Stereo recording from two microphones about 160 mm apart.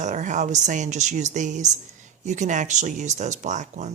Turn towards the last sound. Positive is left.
turn(degrees=-50)  # may be behind; listen again after turning